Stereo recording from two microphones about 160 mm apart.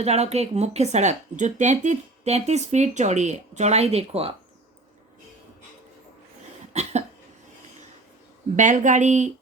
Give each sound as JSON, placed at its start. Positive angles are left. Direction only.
{"t": 0.0, "sound": "speech", "side_deg": -40}
{"t": 8.5, "sound": "speech", "side_deg": -50}